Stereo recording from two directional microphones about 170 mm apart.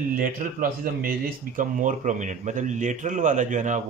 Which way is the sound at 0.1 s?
55° right (ahead or behind).